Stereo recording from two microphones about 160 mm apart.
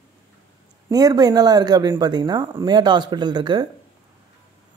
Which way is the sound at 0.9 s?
25° right (ahead or behind).